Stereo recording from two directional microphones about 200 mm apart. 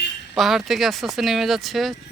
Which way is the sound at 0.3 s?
Centre (ahead or behind).